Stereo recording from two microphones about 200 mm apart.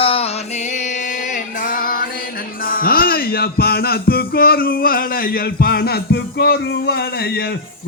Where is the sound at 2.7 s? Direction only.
45° left (ahead or behind).